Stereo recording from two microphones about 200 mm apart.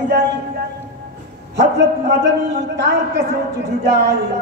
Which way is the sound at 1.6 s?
55° right (ahead or behind).